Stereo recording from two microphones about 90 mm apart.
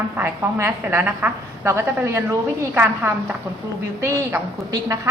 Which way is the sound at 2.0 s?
30° right (ahead or behind).